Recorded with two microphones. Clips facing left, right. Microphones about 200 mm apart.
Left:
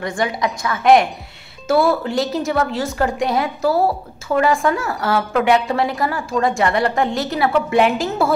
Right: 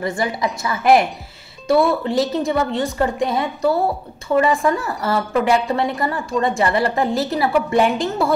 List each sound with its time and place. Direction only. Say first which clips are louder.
0.0 s a woman's voice: even; centre (ahead or behind)